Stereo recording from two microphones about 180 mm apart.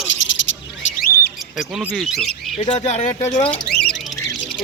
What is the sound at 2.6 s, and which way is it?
Speech, 40° left (ahead or behind).